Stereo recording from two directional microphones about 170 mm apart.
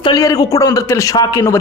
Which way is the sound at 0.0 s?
20° left (ahead or behind).